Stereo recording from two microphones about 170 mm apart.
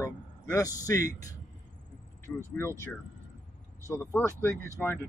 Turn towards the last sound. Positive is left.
turn(degrees=5)  # may be behind; listen again after turning